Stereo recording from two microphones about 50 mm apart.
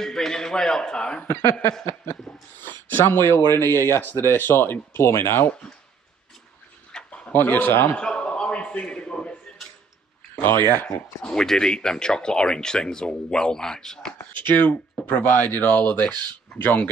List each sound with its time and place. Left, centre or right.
0.0 s speech: centre
1.2 s speech: left
2.6 s a sound: left
3.3 s speech: left
4.9 s speech: left
6.9 s dog: centre
7.6 s speech: left
7.9 s a sound: left
10.3 s speech: left
11.2 s speech: centre
14.5 s speech: left